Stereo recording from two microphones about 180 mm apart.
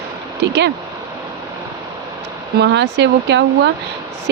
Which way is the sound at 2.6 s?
75° right (ahead or behind).